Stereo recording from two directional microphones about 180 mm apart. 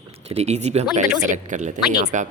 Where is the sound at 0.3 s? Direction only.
35° right (ahead or behind).